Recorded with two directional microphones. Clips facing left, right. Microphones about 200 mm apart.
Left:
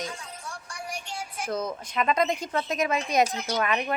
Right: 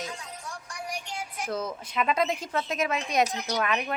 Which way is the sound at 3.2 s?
15° right (ahead or behind).